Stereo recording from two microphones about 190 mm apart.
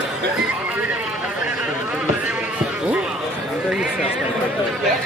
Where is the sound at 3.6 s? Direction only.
5° right (ahead or behind).